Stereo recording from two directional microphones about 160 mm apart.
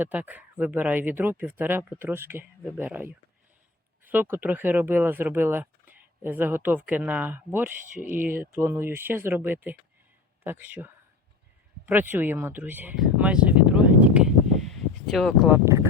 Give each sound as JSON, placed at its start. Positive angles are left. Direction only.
{"t": 0.0, "sound": "speech", "side_deg": -10}
{"t": 13.0, "sound": "a sound", "side_deg": -5}
{"t": 15.4, "sound": "speech", "side_deg": -15}